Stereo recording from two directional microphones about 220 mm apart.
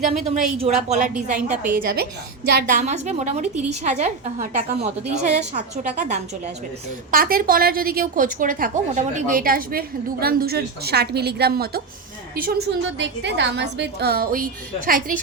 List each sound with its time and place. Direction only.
0.1 s a woman's voice: 30° right (ahead or behind)
12.8 s a woman's voice: 55° right (ahead or behind)